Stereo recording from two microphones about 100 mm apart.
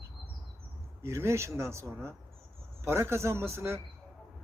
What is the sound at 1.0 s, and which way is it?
Speech, 25° right (ahead or behind).